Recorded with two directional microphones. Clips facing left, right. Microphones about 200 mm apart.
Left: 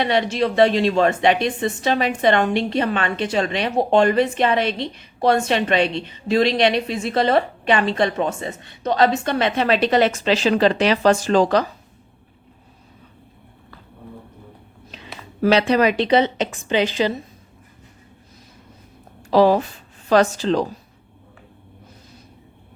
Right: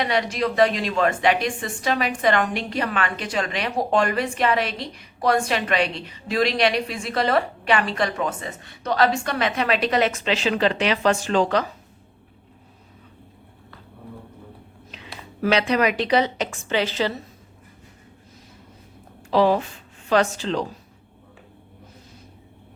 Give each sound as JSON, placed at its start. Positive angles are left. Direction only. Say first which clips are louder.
{"t": 0.0, "sound": "a woman's voice", "louder": "left 3 dB", "side_deg": 25}
{"t": 15.4, "sound": "a woman's voice", "louder": "left 4 dB", "side_deg": 30}
{"t": 19.3, "sound": "a woman's voice", "louder": "left 4 dB", "side_deg": 40}